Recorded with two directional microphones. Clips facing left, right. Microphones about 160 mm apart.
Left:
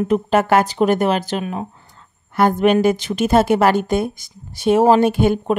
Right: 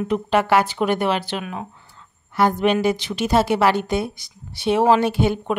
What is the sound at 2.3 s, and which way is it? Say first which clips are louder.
A woman's voice: left 3 dB; 50° left (ahead or behind).